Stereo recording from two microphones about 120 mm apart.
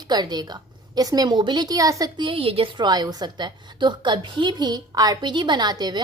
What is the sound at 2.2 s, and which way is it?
A woman's voice, 45° right (ahead or behind).